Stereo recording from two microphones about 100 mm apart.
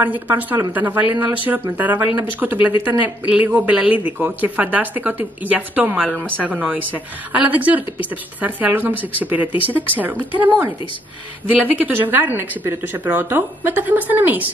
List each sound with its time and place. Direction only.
0.0 s speech: 15° right (ahead or behind)